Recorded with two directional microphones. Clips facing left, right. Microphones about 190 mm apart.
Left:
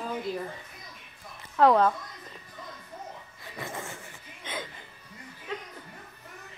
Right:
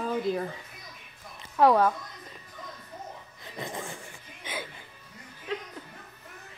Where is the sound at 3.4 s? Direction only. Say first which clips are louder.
Right 1 dB; 15° right (ahead or behind).